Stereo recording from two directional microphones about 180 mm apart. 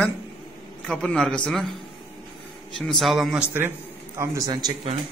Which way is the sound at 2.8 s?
Centre (ahead or behind).